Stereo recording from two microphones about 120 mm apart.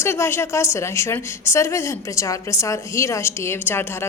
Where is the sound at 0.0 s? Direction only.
20° left (ahead or behind).